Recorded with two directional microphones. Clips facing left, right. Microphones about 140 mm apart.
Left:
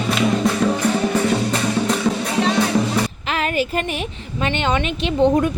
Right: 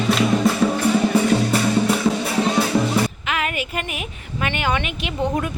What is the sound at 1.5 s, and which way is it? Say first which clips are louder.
Music: right 1 dB; 5° right (ahead or behind).